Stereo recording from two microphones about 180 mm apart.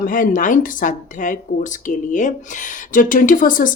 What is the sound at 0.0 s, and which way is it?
A woman's voice, 50° left (ahead or behind).